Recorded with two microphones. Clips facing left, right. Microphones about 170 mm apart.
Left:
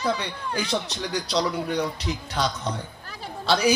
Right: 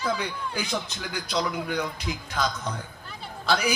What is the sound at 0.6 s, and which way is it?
Speech, 90° left.